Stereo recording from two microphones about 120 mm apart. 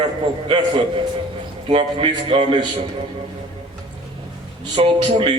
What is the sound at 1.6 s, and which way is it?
A man's voice, 50° right (ahead or behind).